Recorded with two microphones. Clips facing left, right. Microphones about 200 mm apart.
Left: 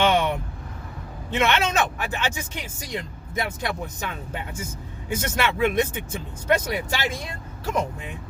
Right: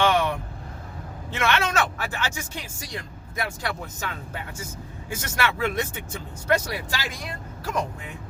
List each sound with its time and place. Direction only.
0.0 s vehicle: 20° left (ahead or behind)
1.3 s speech: 20° left (ahead or behind)